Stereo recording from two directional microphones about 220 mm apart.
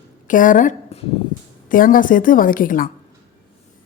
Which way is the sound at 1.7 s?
40° left (ahead or behind).